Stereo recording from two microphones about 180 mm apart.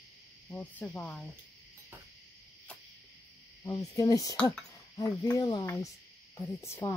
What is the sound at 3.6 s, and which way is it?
Speech, 20° left (ahead or behind).